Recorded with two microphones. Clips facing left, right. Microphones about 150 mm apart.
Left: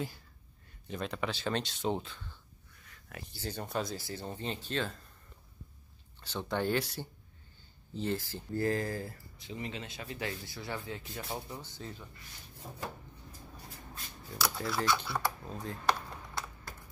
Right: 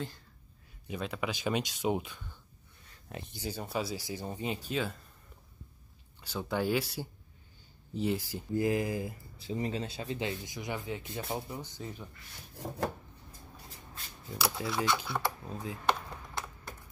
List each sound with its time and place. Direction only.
0.8 s speech: 5° right (ahead or behind)
2.8 s a sound: 25° right (ahead or behind)
3.4 s speech: 10° right (ahead or behind)
6.2 s speech: 10° right (ahead or behind)
9.4 s speech: 35° right (ahead or behind); by 12.0 s 15° right (ahead or behind)
12.5 s wood: 90° right
14.4 s speech: centre (ahead or behind)